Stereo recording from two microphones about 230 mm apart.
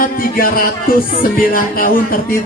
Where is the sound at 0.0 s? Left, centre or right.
Left.